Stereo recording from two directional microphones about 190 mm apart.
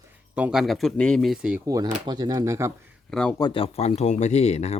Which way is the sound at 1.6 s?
20° right (ahead or behind).